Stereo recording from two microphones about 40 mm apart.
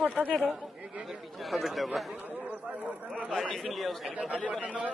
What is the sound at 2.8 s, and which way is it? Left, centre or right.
Speech, right.